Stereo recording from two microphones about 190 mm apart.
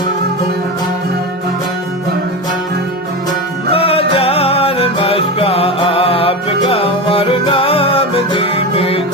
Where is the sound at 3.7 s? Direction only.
30° left (ahead or behind).